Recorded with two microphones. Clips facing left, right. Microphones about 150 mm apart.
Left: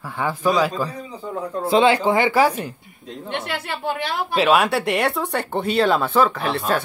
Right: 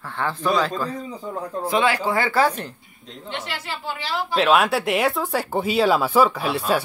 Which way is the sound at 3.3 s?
55° left (ahead or behind).